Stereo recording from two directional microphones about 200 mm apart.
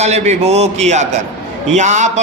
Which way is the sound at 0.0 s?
35° right (ahead or behind).